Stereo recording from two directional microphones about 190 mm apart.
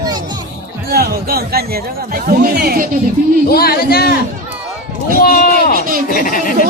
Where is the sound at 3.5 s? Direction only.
55° left (ahead or behind).